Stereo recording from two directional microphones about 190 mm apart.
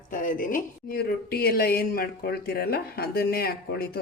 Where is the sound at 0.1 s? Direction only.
45° left (ahead or behind).